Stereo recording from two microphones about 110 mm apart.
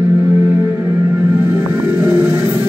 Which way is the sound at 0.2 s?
15° right (ahead or behind).